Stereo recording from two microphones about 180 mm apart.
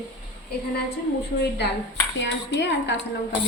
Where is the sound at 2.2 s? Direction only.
75° left (ahead or behind).